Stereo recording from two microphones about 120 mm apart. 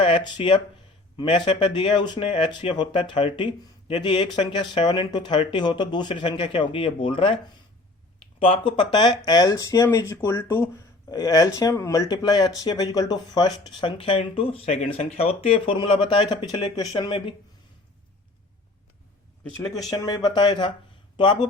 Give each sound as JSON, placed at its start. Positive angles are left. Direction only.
{"t": 0.0, "sound": "speech", "side_deg": 45}
{"t": 8.4, "sound": "speech", "side_deg": 45}
{"t": 19.9, "sound": "speech", "side_deg": 30}